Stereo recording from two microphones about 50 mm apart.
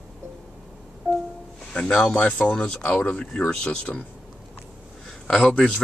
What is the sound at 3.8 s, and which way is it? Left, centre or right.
Speech, left.